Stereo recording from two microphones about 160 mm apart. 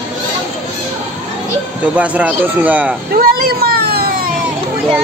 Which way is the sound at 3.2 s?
70° right (ahead or behind).